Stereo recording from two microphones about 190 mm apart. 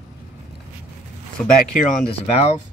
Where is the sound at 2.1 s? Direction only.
30° left (ahead or behind).